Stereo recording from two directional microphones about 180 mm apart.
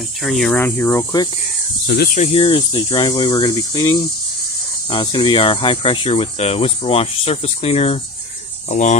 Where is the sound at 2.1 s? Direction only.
35° left (ahead or behind).